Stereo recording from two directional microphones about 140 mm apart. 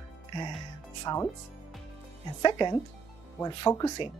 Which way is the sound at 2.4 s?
30° left (ahead or behind).